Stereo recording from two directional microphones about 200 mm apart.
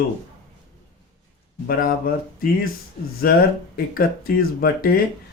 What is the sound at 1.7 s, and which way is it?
Speech, 45° left (ahead or behind).